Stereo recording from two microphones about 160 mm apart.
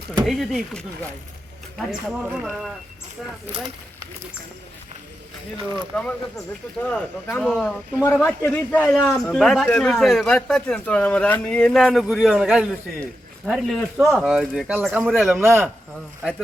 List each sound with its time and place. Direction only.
0.3 s a man's voice: centre (ahead or behind)
3.5 s speech: 30° right (ahead or behind)
5.9 s a man's voice: 10° left (ahead or behind)
15.4 s a man's voice: 15° right (ahead or behind)